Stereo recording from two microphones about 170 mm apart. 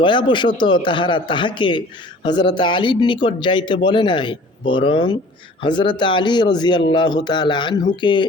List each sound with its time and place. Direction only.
0.0 s speech: 30° left (ahead or behind)